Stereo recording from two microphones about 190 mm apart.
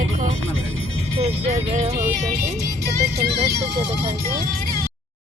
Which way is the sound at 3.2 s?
60° right (ahead or behind).